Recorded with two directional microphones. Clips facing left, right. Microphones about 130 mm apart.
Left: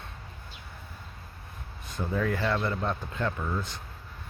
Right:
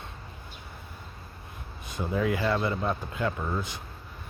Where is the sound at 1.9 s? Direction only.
10° right (ahead or behind).